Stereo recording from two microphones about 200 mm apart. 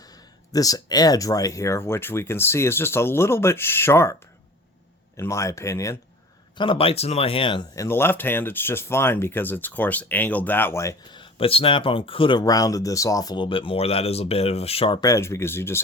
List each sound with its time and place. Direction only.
0.5 s speech: 20° left (ahead or behind)
6.6 s speech: 25° left (ahead or behind)
15.1 s speech: 15° left (ahead or behind)